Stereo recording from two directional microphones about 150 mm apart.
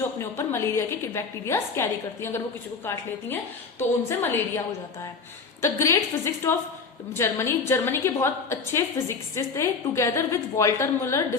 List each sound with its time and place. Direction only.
0.2 s a woman's voice: 15° left (ahead or behind)
5.6 s a woman's voice: 20° left (ahead or behind)